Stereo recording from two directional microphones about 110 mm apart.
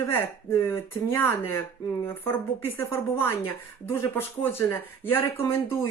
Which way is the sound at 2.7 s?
25° left (ahead or behind).